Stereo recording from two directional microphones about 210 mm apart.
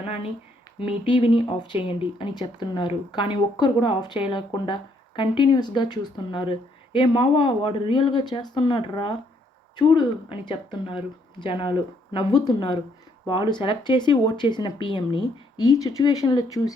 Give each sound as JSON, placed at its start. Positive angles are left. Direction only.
{"t": 0.8, "sound": "speech", "side_deg": 25}